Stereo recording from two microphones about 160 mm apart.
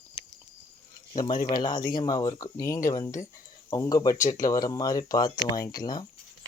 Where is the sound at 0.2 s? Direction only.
35° left (ahead or behind).